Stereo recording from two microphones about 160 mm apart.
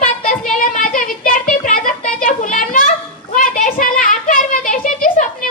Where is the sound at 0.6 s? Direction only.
60° left (ahead or behind).